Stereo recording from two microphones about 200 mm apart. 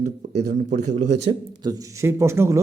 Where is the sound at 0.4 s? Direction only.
35° right (ahead or behind).